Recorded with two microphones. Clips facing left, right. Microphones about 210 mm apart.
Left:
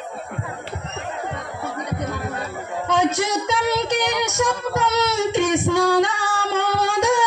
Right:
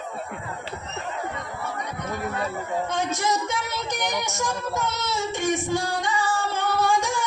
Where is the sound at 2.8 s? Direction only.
70° left (ahead or behind).